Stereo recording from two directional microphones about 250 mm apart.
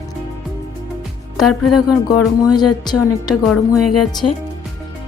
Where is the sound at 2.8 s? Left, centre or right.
Centre.